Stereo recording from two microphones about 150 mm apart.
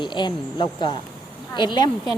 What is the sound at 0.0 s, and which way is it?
Speech, 30° left (ahead or behind).